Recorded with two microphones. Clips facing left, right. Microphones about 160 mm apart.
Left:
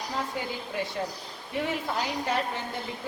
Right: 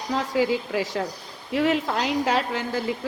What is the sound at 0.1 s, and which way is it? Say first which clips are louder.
Speech: right 12 dB; 90° right.